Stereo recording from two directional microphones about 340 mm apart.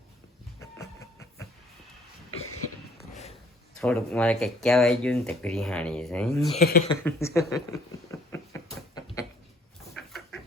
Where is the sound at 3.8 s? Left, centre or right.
Centre.